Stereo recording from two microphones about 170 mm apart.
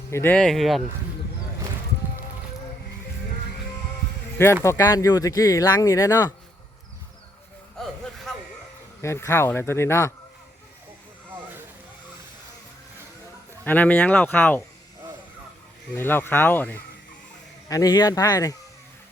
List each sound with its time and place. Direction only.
0.1 s speech: 10° left (ahead or behind)
4.6 s speech: 15° left (ahead or behind)
7.8 s a sound: centre (ahead or behind)
9.0 s speech: 15° left (ahead or behind)
13.7 s speech: 10° left (ahead or behind)
16.0 s speech: 10° left (ahead or behind)
17.7 s speech: 20° left (ahead or behind)